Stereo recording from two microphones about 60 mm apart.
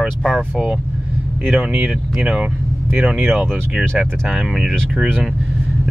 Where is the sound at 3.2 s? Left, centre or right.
Centre.